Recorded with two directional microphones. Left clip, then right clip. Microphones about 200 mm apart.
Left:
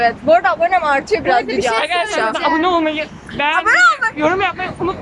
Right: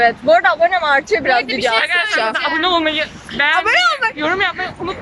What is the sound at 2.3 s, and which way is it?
Speech, 10° left (ahead or behind).